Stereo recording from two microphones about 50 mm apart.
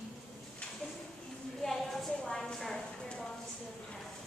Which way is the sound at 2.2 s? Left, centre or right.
Centre.